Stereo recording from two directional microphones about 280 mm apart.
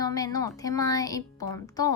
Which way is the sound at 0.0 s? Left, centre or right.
Centre.